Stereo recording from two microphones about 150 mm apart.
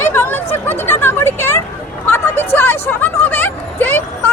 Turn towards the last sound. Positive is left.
turn(degrees=15)  # may be behind; listen again after turning